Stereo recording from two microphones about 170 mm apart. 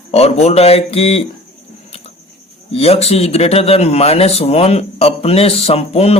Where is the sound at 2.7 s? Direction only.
35° left (ahead or behind).